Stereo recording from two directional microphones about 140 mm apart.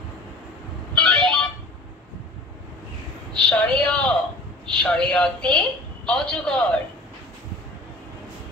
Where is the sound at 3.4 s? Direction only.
10° left (ahead or behind).